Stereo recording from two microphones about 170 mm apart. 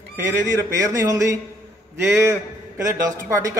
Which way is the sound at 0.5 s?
15° right (ahead or behind).